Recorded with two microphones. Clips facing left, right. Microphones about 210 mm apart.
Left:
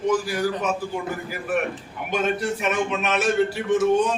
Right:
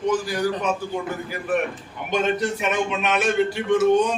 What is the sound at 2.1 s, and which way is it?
A man's voice, 5° left (ahead or behind).